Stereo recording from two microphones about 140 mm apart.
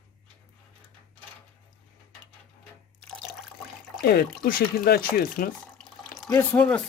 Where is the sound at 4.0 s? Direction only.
90° left.